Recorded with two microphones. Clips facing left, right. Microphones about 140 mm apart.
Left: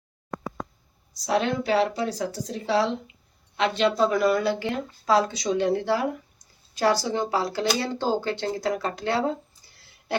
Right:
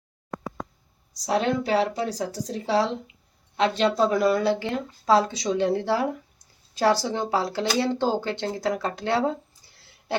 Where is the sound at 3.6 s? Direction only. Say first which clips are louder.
Right 1 dB; 35° right (ahead or behind).